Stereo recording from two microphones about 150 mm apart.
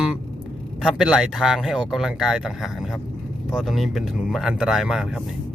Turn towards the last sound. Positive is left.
turn(degrees=-5)  # may be behind; listen again after turning